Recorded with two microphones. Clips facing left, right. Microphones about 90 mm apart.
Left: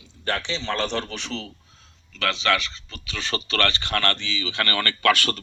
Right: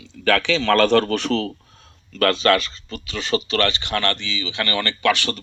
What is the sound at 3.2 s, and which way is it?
Speech, 35° left (ahead or behind).